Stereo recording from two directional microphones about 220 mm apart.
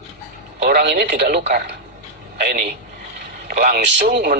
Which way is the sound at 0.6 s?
45° right (ahead or behind).